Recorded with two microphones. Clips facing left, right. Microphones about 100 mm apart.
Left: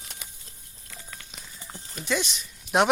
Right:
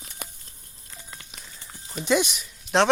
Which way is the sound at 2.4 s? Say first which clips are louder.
Right 1 dB; 5° left (ahead or behind).